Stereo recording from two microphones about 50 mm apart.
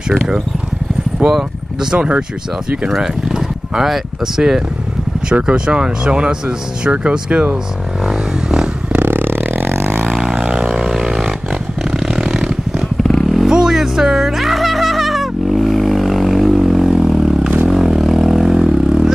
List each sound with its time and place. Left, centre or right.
1.3 s speech: centre
2.9 s speech: centre
5.3 s speech: right
8.0 s a sound: centre
9.0 s a sound: right
10.3 s a sound: centre
13.0 s vehicle: centre
13.5 s music: centre
17.6 s vehicle: centre